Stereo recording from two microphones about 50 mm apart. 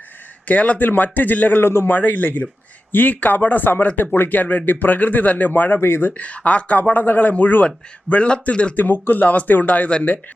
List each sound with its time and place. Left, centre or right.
0.4 s speech: left
1.6 s a man's voice: left
1.9 s a man's voice: left
8.8 s speech: left